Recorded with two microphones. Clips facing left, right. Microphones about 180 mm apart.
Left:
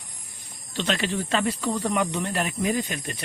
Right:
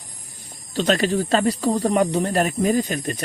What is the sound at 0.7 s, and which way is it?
Speech, 40° right (ahead or behind).